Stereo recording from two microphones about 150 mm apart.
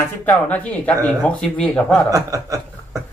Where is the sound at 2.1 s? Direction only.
20° right (ahead or behind).